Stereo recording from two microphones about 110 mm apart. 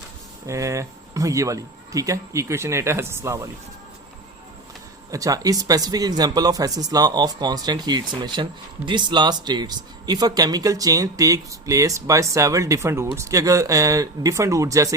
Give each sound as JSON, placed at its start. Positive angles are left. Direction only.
{"t": 0.4, "sound": "speech", "side_deg": -30}
{"t": 5.1, "sound": "speech", "side_deg": -35}